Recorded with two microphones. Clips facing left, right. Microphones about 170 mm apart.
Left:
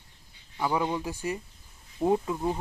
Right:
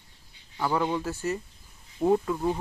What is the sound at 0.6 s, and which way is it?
Speech, 10° left (ahead or behind).